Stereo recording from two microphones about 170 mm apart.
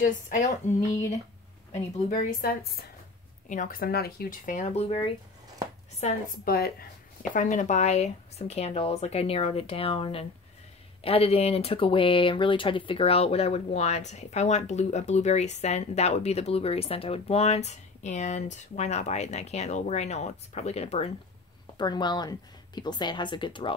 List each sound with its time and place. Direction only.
0.0 s speech: 45° left (ahead or behind)
2.0 s speech: 60° left (ahead or behind); by 6.2 s 45° left (ahead or behind)
6.4 s speech: 65° left (ahead or behind)
7.3 s speech: 50° left (ahead or behind)
21.7 s speech: 25° left (ahead or behind)